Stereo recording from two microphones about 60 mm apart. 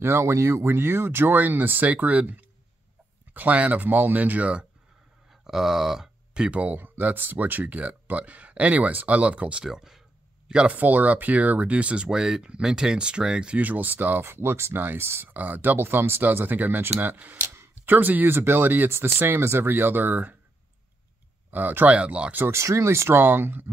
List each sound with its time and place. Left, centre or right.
0.0 s speech: right
0.7 s speech: right
5.3 s speech: centre
10.5 s speech: right
13.6 s speech: right
15.2 s speech: right
21.5 s speech: right
21.9 s speech: centre
22.5 s speech: right